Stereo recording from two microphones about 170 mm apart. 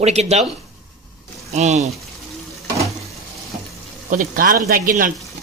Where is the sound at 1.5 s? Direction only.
40° right (ahead or behind).